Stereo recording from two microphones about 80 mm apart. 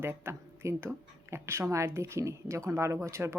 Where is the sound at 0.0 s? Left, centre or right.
Right.